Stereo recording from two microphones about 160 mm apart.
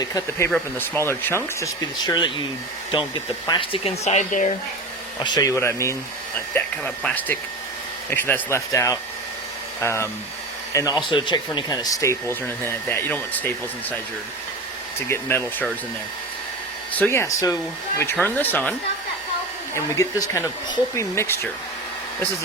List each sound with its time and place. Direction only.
0.0 s speech: 20° left (ahead or behind); by 4.5 s 50° left (ahead or behind)
5.2 s speech: 25° left (ahead or behind)
11.1 s speech: 30° left (ahead or behind); by 13.5 s 10° left (ahead or behind)
15.1 s speech: 15° left (ahead or behind)
16.9 s speech: 15° left (ahead or behind)
19.7 s speech: 20° left (ahead or behind)